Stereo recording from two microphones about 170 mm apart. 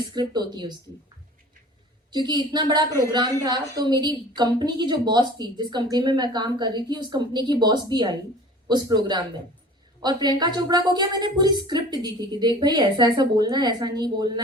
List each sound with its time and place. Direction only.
0.1 s a woman's voice: 25° right (ahead or behind)
2.1 s a woman's voice: 25° right (ahead or behind)